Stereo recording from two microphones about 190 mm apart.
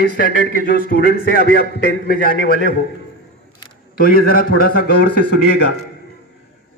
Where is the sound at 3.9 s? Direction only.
50° left (ahead or behind).